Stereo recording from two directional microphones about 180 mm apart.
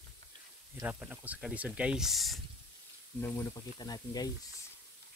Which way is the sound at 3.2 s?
15° left (ahead or behind).